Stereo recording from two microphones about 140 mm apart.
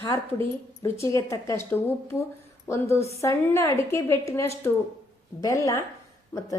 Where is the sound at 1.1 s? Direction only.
20° left (ahead or behind).